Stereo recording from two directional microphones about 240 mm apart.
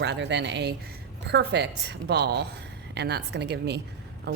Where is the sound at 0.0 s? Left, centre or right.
Right.